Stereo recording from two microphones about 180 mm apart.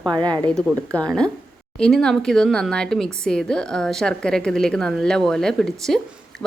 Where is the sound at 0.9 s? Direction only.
5° left (ahead or behind).